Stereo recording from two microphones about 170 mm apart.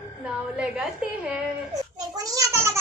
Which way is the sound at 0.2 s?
5° right (ahead or behind).